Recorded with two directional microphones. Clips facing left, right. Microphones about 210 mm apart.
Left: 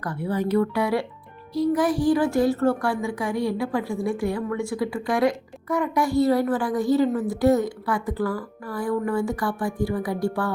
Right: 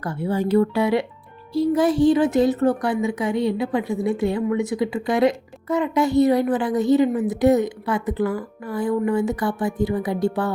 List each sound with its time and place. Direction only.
0.0 s speech: 25° right (ahead or behind)